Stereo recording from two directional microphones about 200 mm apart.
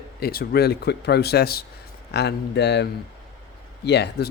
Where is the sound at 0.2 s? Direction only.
50° left (ahead or behind).